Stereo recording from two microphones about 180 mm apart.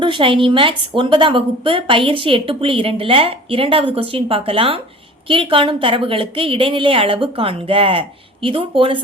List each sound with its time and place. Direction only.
0.0 s a woman's voice: 30° right (ahead or behind)